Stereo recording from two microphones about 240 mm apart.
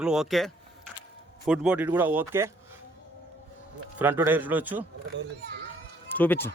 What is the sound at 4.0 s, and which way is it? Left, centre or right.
Speech, centre.